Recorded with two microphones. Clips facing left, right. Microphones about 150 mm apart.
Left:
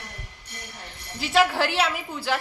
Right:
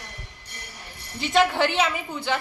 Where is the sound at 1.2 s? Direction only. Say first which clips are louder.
Right 1 dB; centre (ahead or behind).